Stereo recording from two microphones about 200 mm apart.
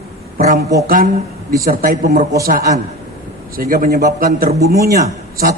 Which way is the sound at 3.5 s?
45° right (ahead or behind).